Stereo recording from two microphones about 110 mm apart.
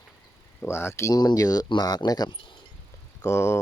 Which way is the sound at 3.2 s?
25° left (ahead or behind).